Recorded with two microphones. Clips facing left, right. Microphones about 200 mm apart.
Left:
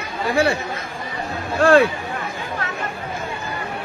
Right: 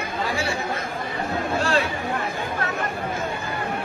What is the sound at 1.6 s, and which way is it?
Speech, 55° left (ahead or behind).